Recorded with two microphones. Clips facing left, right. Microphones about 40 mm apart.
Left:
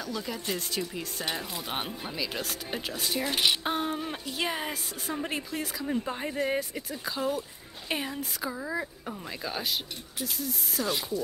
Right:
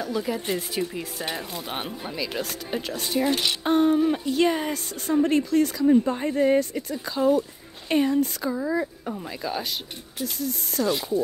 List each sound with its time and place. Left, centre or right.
0.0 s speech: centre